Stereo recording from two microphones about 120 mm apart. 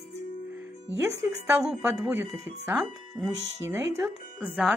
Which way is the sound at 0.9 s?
25° right (ahead or behind).